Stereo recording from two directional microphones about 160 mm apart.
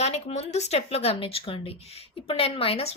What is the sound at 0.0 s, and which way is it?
Speech, 40° left (ahead or behind).